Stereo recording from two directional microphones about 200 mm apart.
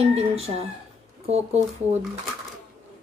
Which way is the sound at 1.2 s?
30° right (ahead or behind).